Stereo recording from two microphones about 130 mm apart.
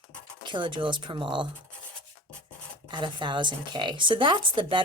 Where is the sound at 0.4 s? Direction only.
40° right (ahead or behind).